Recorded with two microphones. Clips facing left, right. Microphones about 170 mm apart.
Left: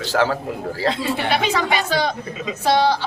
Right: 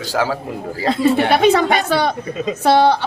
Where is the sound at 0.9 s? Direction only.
55° right (ahead or behind).